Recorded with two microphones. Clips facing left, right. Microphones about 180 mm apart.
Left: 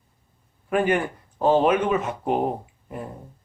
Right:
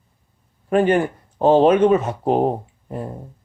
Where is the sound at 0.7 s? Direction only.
30° right (ahead or behind).